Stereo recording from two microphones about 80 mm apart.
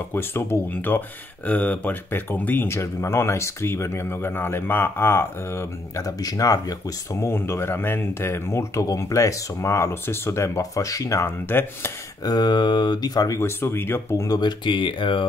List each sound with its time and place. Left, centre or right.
0.1 s speech: left
5.9 s speech: left
7.2 s speech: left
11.2 s speech: left
12.3 s speech: left
13.4 s speech: left
14.2 s speech: left